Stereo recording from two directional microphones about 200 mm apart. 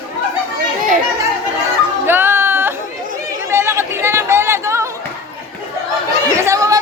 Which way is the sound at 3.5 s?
10° right (ahead or behind).